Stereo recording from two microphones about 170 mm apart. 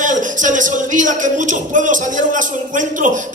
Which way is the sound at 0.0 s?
50° right (ahead or behind).